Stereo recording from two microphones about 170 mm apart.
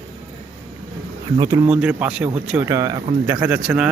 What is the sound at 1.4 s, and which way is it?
Speech, 20° right (ahead or behind).